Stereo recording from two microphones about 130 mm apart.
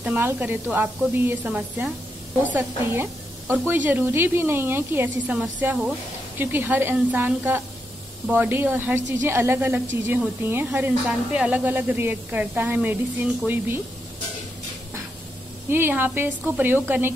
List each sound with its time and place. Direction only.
0.0 s a woman's voice: 15° right (ahead or behind)
15.7 s a woman's voice: 15° right (ahead or behind)